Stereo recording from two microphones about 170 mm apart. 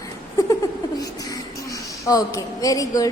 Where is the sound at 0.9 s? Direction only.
20° left (ahead or behind).